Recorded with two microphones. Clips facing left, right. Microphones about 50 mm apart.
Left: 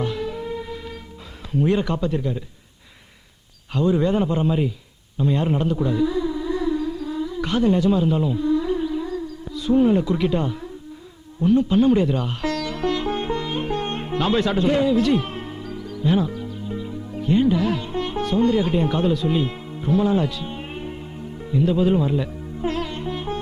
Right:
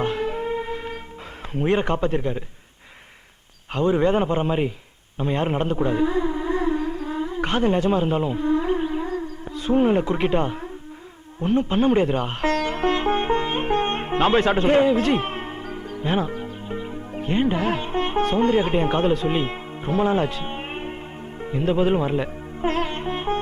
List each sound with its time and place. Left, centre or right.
0.0 s music: right
1.5 s a man's voice: right
3.7 s a man's voice: right
5.7 s music: right
11.3 s sitar: right